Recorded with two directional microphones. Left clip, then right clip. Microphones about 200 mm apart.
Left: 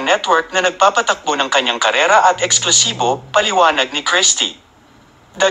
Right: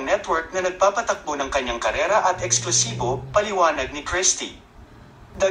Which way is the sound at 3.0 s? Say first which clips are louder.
Left 7 dB; 20° left (ahead or behind).